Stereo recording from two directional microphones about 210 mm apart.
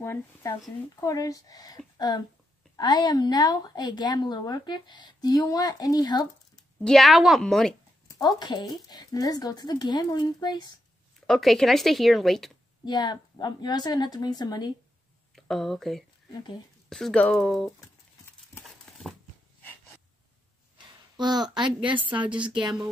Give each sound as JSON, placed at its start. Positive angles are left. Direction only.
{"t": 0.0, "sound": "a woman's voice", "side_deg": 15}
{"t": 6.8, "sound": "speech", "side_deg": 0}
{"t": 8.2, "sound": "a woman's voice", "side_deg": 20}
{"t": 11.1, "sound": "speech", "side_deg": 0}
{"t": 12.8, "sound": "a woman's voice", "side_deg": 20}
{"t": 15.3, "sound": "speech", "side_deg": 0}
{"t": 16.3, "sound": "speech", "side_deg": 20}
{"t": 16.9, "sound": "speech", "side_deg": 5}
{"t": 20.7, "sound": "a woman's voice", "side_deg": -20}